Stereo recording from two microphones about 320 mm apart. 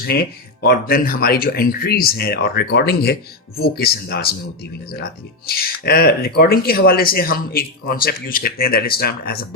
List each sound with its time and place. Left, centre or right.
0.0 s speech: left
5.5 s speech: left